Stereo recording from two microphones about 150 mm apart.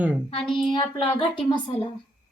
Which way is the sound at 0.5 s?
35° left (ahead or behind).